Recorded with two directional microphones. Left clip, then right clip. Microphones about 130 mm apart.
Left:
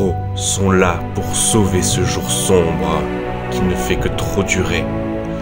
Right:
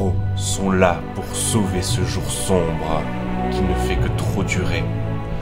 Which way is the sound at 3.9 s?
25° left (ahead or behind).